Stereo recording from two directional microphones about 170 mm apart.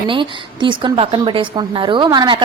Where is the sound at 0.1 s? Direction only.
30° right (ahead or behind).